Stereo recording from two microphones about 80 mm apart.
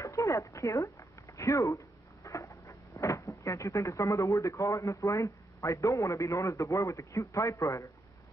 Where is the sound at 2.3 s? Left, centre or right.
Left.